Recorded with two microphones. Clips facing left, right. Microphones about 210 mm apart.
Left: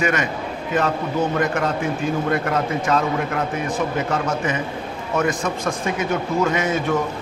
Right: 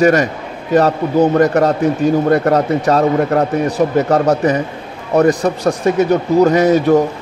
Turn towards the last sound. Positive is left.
turn(degrees=-40)  # may be behind; listen again after turning